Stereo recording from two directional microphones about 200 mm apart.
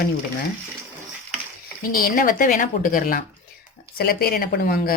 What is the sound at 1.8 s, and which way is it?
Speech, 45° left (ahead or behind).